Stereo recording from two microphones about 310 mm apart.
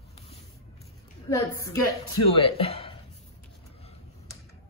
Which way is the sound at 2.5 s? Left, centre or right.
Centre.